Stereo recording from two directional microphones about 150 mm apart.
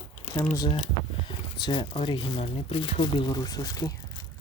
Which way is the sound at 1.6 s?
35° left (ahead or behind).